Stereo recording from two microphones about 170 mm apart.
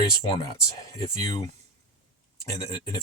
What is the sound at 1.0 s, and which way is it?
Speech, 25° left (ahead or behind).